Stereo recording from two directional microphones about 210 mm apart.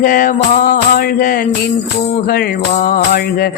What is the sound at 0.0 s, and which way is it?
Music, 40° left (ahead or behind).